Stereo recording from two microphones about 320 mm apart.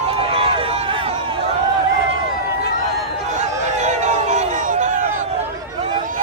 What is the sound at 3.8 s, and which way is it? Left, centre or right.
Music, right.